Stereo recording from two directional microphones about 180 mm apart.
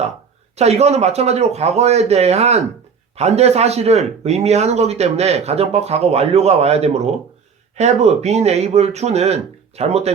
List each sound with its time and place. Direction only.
0.5 s speech: 35° right (ahead or behind)